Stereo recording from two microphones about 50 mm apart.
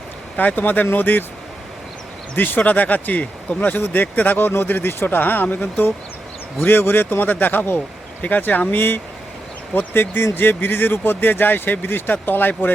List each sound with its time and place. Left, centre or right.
0.3 s speech: left
2.3 s speech: left
2.6 s speech: left